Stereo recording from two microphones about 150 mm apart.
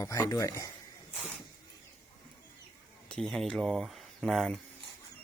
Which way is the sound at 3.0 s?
5° left (ahead or behind).